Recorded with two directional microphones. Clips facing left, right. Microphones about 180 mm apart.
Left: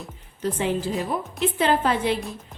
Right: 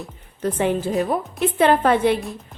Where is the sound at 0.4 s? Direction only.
55° right (ahead or behind).